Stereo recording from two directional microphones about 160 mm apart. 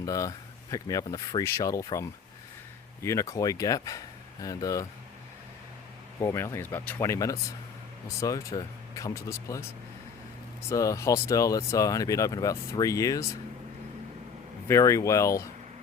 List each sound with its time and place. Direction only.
0.0 s speech: 20° left (ahead or behind)
6.1 s speech: 15° left (ahead or behind)
10.7 s speech: 20° left (ahead or behind)
14.7 s speech: 20° left (ahead or behind)